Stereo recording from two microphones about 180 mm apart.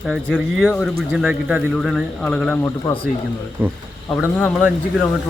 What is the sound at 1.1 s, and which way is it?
A man's voice, 5° right (ahead or behind).